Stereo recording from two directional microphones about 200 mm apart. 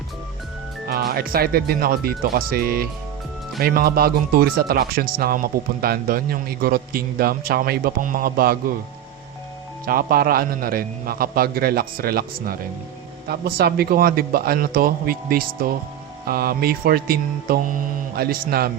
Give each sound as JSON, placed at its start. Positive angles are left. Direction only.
{"t": 0.9, "sound": "a man's voice", "side_deg": -50}
{"t": 9.8, "sound": "a man's voice", "side_deg": -45}